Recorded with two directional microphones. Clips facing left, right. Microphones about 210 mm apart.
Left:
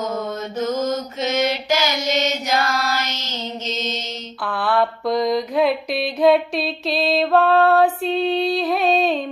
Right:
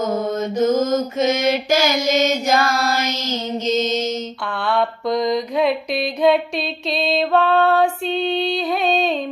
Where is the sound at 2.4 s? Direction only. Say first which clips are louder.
Right 3 dB; 45° right (ahead or behind).